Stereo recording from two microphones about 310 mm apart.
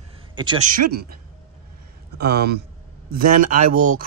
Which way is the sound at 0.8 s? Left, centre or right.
Right.